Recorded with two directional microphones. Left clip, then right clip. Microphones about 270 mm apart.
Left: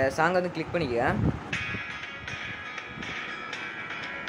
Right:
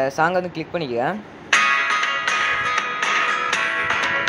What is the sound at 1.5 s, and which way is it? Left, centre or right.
Music, right.